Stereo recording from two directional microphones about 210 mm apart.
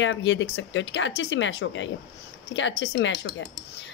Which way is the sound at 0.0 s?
60° left (ahead or behind).